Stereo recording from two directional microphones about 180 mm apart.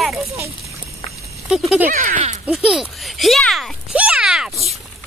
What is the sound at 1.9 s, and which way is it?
Speech, 50° right (ahead or behind).